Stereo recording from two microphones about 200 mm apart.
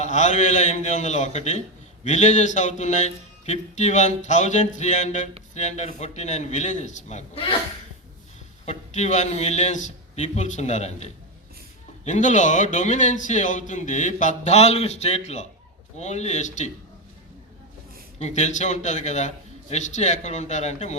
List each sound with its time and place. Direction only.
0.0 s a man's voice: 35° left (ahead or behind)
8.6 s a man's voice: 35° left (ahead or behind)
18.2 s a man's voice: 35° left (ahead or behind)